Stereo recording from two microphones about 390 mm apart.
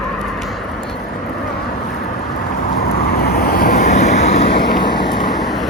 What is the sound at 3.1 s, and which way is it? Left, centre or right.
Vehicle, left.